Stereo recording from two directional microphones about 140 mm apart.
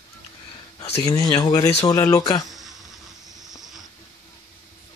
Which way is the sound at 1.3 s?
30° left (ahead or behind).